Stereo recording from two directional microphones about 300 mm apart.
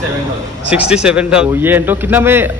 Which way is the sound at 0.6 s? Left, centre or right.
Centre.